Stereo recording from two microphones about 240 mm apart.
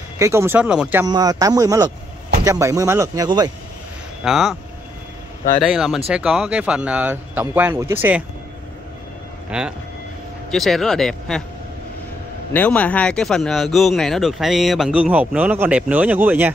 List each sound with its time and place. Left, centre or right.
0.2 s speech: centre
1.0 s speech: centre
4.2 s speech: centre
5.6 s speech: centre
9.5 s speech: centre
12.5 s speech: centre